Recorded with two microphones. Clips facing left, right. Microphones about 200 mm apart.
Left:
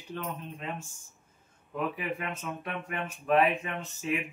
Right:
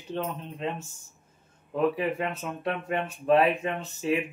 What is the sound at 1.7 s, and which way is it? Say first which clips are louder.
A man's voice: right 7 dB; 30° right (ahead or behind).